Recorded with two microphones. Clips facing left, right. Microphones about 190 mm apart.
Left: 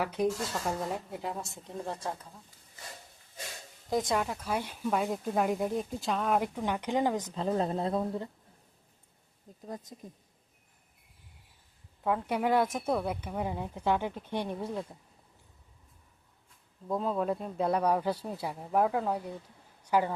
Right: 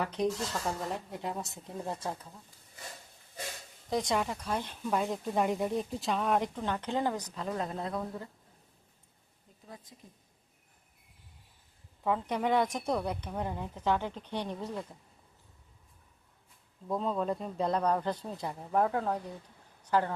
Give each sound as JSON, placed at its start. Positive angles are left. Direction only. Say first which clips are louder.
{"t": 0.0, "sound": "speech", "louder": "left 1 dB", "side_deg": 5}
{"t": 3.8, "sound": "speech", "louder": "left 1 dB", "side_deg": 0}
{"t": 7.3, "sound": "speech", "louder": "left 5 dB", "side_deg": 30}
{"t": 9.6, "sound": "speech", "louder": "left 8 dB", "side_deg": 45}
{"t": 12.0, "sound": "speech", "louder": "left 1 dB", "side_deg": 5}
{"t": 16.9, "sound": "speech", "louder": "left 1 dB", "side_deg": 5}